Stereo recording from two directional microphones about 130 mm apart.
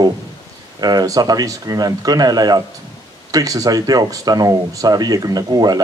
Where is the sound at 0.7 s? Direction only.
30° right (ahead or behind).